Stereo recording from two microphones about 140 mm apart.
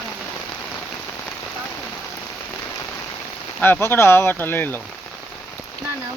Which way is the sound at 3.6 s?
15° left (ahead or behind).